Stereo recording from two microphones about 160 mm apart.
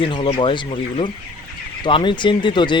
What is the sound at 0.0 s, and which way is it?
Speech, 30° left (ahead or behind).